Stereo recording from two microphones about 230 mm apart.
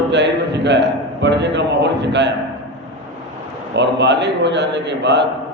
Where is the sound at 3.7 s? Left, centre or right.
Right.